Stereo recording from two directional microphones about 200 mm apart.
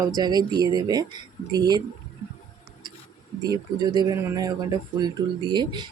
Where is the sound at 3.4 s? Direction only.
20° right (ahead or behind).